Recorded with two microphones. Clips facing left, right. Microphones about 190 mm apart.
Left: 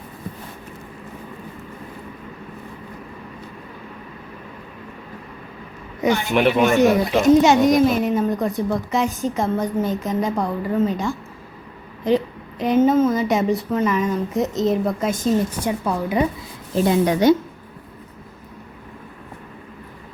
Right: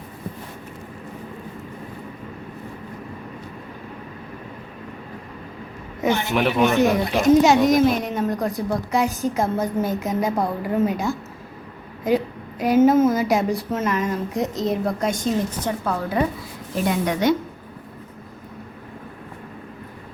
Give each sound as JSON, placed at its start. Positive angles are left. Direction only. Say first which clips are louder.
{"t": 6.3, "sound": "speech", "louder": "left 3 dB", "side_deg": 0}
{"t": 16.7, "sound": "a woman's voice", "louder": "left 5 dB", "side_deg": 30}